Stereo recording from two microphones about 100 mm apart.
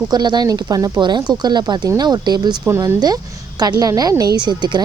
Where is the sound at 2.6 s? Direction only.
30° right (ahead or behind).